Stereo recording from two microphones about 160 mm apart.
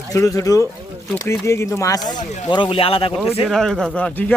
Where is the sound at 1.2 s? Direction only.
15° left (ahead or behind).